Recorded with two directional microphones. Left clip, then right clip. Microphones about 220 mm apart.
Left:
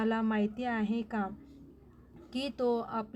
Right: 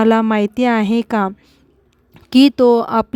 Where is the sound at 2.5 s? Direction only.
60° right (ahead or behind).